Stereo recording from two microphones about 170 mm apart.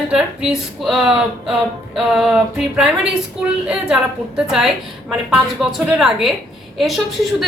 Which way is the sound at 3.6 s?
5° right (ahead or behind).